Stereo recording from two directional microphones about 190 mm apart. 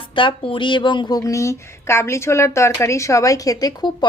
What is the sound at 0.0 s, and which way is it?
A woman's voice, 25° left (ahead or behind).